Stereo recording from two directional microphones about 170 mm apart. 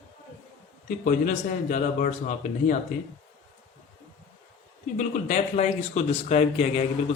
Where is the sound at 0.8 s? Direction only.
50° left (ahead or behind).